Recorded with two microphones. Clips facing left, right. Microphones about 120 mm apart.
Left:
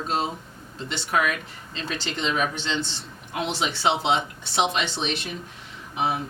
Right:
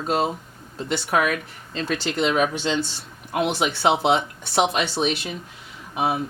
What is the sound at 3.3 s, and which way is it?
Speech, 50° right (ahead or behind).